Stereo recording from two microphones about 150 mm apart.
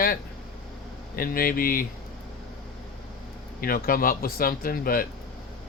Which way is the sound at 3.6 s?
75° left (ahead or behind).